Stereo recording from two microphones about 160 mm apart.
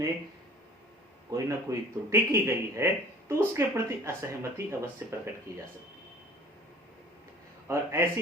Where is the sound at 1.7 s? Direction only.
20° right (ahead or behind).